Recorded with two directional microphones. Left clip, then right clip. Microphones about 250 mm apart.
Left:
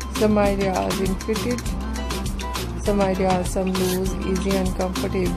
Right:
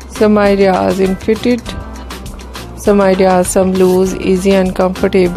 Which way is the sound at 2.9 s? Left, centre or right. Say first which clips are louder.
Right 12 dB; right.